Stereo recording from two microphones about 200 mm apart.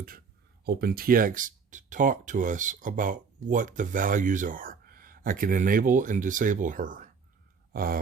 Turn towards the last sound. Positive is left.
turn(degrees=-45)  # may be behind; listen again after turning